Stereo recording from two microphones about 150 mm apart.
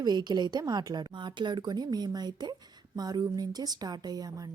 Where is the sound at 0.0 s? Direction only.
25° right (ahead or behind).